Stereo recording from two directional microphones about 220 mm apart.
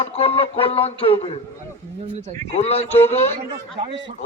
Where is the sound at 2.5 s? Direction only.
30° left (ahead or behind).